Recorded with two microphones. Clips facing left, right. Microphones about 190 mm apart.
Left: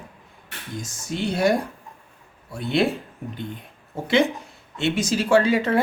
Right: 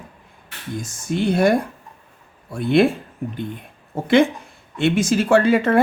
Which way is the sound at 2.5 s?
55° right (ahead or behind).